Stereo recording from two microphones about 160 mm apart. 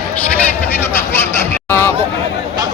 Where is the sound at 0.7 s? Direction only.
15° left (ahead or behind).